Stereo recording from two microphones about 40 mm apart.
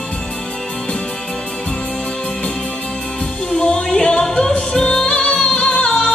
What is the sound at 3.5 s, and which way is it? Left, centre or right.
Music, left.